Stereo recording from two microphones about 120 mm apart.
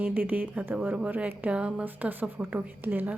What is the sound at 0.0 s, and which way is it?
A woman's voice, 15° right (ahead or behind).